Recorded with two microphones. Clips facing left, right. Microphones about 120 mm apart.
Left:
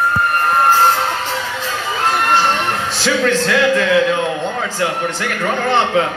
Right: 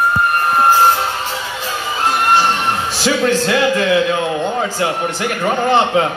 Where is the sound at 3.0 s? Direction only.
15° right (ahead or behind).